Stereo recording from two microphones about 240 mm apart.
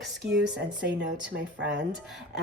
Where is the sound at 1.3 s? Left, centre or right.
Right.